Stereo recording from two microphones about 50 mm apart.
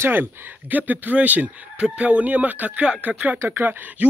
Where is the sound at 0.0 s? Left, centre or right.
Right.